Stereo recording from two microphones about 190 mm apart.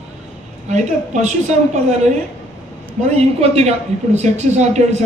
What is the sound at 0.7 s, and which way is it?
Speech, 40° right (ahead or behind).